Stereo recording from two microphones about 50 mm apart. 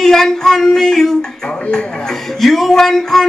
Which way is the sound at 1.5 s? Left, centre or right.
Centre.